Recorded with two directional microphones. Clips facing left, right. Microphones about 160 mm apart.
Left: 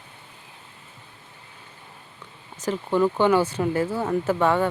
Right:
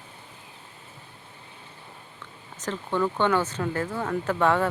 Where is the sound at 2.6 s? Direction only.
10° left (ahead or behind).